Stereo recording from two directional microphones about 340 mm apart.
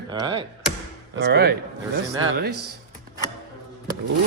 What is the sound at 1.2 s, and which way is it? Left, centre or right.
Speech, right.